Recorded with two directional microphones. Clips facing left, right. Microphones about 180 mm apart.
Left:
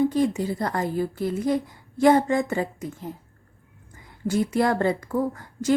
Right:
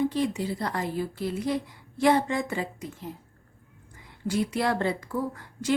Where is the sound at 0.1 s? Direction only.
45° left (ahead or behind).